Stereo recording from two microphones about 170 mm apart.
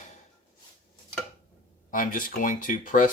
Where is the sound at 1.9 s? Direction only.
55° left (ahead or behind).